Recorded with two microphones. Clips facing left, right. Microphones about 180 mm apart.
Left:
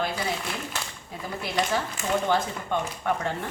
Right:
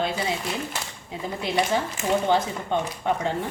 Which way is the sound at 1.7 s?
20° right (ahead or behind).